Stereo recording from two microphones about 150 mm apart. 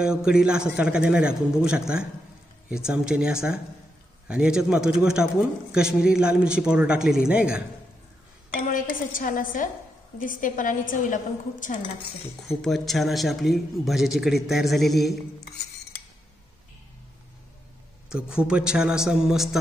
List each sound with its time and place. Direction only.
0.0 s a man's voice: 5° right (ahead or behind)
8.5 s a woman's voice: 65° left (ahead or behind)
12.6 s a man's voice: centre (ahead or behind)
18.1 s a man's voice: 5° right (ahead or behind)